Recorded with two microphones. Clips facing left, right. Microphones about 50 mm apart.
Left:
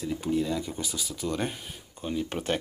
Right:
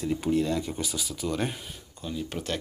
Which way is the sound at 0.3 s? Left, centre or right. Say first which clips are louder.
Right 1 dB; centre.